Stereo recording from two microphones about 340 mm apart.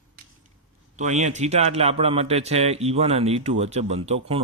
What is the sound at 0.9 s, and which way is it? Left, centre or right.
Speech, right.